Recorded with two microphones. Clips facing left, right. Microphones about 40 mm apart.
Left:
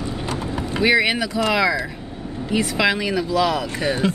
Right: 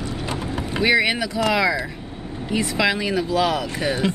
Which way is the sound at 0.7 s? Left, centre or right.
Centre.